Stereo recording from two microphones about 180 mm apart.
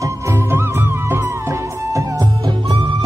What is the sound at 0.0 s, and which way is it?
Music, 15° right (ahead or behind).